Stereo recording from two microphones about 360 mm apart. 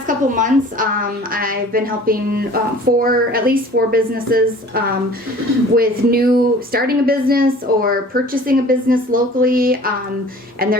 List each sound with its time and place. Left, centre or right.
0.3 s speech: right